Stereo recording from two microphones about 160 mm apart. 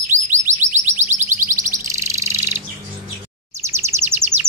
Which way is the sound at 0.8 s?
45° right (ahead or behind).